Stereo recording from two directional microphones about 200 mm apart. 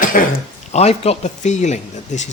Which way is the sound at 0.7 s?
30° left (ahead or behind).